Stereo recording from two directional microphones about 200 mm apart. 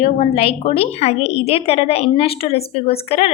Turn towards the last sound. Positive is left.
turn(degrees=30)  # may be behind; listen again after turning